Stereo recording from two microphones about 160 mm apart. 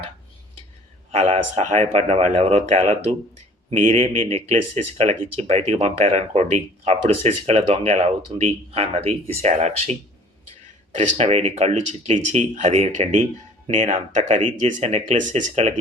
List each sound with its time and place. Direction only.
1.1 s speech: 40° right (ahead or behind)
10.9 s speech: 45° right (ahead or behind)